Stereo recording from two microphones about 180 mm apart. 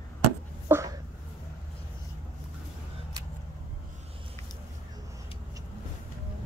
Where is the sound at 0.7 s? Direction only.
15° right (ahead or behind).